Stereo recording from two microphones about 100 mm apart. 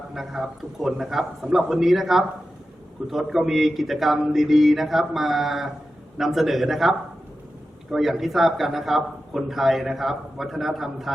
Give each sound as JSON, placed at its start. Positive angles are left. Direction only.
{"t": 0.1, "sound": "speech", "side_deg": -5}